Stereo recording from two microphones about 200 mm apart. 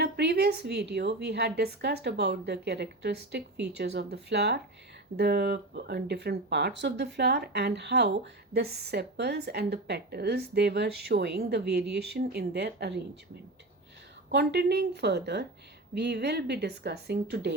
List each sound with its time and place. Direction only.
0.0 s speech: 55° right (ahead or behind)
14.3 s speech: 55° right (ahead or behind)